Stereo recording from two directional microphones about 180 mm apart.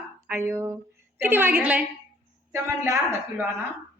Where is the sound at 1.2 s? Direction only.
10° right (ahead or behind).